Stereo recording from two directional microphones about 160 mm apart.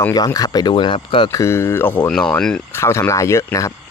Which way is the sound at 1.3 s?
20° left (ahead or behind).